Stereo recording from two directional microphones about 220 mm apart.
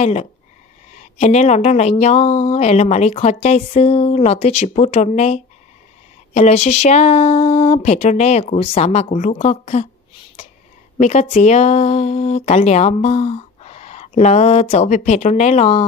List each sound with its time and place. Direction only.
0.0 s speech: 30° left (ahead or behind)
11.0 s speech: 30° left (ahead or behind)